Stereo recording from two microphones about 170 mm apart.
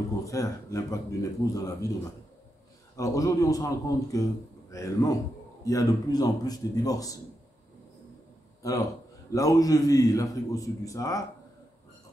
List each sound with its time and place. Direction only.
0.2 s a man's voice: 20° left (ahead or behind)
3.0 s a man's voice: 20° left (ahead or behind)
9.3 s a man's voice: 20° left (ahead or behind)